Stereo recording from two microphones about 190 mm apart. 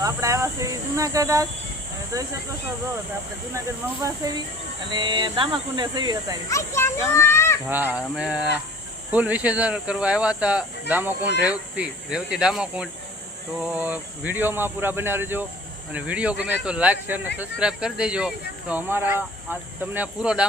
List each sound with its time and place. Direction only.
0.0 s speech: 15° right (ahead or behind)
4.9 s speech: 25° right (ahead or behind)
6.5 s a child's voice: 15° left (ahead or behind)
7.7 s speech: 10° right (ahead or behind)